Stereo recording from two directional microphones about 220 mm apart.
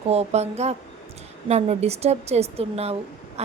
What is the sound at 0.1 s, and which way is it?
Speech, 30° right (ahead or behind).